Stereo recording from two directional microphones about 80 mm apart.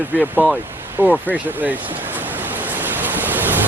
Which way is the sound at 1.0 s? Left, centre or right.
Centre.